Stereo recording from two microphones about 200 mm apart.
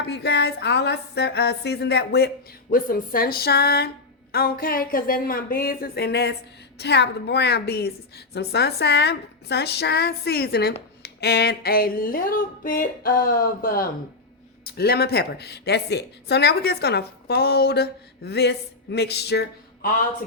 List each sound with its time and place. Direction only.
0.0 s music: 55° left (ahead or behind)
6.7 s a woman's voice: 55° left (ahead or behind)
11.0 s music: 55° left (ahead or behind)